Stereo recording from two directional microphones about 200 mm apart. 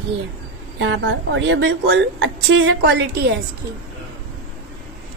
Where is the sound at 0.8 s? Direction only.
65° right (ahead or behind).